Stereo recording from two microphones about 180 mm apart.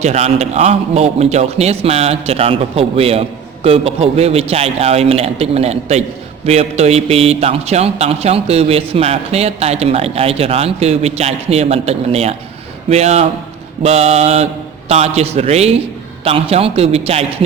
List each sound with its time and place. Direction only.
0.0 s speech: 40° right (ahead or behind)